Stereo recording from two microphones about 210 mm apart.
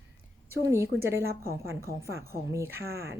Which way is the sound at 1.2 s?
45° right (ahead or behind).